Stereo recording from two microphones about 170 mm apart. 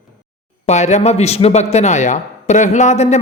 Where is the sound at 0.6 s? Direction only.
40° left (ahead or behind).